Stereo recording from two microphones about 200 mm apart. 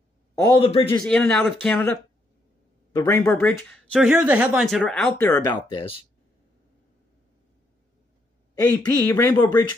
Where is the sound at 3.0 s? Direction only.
10° left (ahead or behind).